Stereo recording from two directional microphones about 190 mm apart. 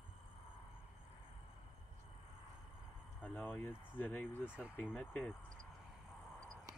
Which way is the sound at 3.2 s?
10° left (ahead or behind).